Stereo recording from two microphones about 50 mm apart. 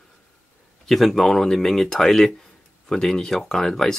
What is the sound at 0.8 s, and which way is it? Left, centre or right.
Speech, centre.